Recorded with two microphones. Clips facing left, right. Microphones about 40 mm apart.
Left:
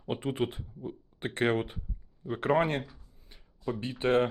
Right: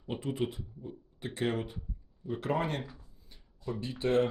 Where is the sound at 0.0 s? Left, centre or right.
Left.